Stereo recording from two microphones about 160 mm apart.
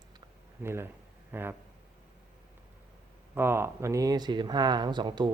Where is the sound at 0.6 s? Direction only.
15° right (ahead or behind).